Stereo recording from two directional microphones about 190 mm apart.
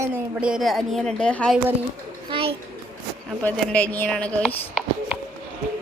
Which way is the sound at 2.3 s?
30° right (ahead or behind).